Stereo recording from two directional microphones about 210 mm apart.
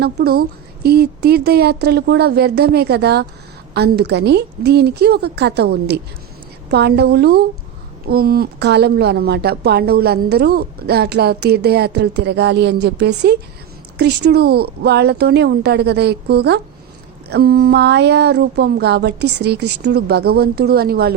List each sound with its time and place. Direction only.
0.0 s a woman's voice: 50° right (ahead or behind)